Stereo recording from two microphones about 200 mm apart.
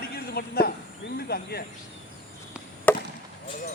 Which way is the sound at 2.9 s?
10° left (ahead or behind).